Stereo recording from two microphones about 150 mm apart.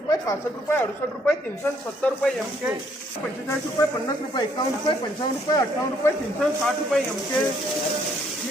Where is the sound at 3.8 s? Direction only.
20° left (ahead or behind).